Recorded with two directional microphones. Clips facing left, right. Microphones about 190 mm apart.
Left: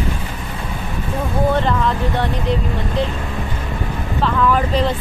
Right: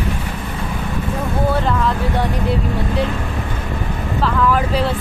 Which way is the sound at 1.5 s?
5° right (ahead or behind).